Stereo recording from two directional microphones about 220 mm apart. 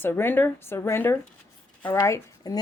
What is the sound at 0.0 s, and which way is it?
A woman's voice, 10° left (ahead or behind).